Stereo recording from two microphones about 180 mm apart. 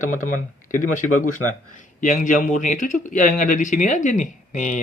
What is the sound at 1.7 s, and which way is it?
Speech, 45° left (ahead or behind).